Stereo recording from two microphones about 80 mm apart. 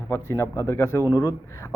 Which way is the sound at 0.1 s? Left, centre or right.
Left.